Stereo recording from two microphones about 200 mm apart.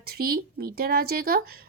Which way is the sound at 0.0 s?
50° right (ahead or behind).